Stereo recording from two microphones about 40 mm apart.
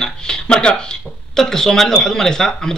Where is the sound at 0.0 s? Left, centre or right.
Centre.